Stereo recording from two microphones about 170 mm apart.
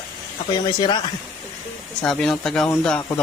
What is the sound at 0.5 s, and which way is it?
Speech, 25° left (ahead or behind).